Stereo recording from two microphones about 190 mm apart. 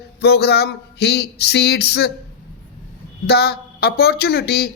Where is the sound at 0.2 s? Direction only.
60° left (ahead or behind).